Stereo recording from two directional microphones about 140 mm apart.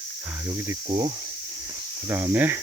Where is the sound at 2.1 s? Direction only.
15° right (ahead or behind).